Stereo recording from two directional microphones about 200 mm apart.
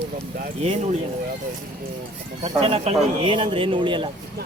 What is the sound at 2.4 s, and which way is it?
Speech, 30° right (ahead or behind).